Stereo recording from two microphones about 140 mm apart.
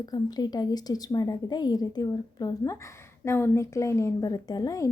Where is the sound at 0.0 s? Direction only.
30° left (ahead or behind).